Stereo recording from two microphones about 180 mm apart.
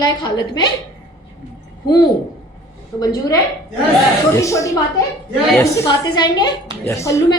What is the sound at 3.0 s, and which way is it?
Speech, 20° left (ahead or behind).